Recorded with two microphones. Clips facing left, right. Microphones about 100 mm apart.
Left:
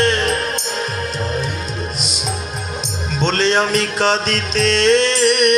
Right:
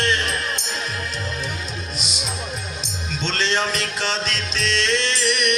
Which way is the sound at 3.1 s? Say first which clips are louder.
Left 7 dB; 45° left (ahead or behind).